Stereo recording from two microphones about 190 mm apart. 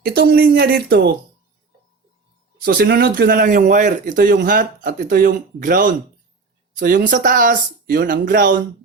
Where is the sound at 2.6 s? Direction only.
55° right (ahead or behind).